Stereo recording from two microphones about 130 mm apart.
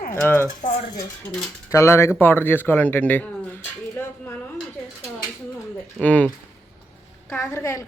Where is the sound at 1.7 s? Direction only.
20° left (ahead or behind).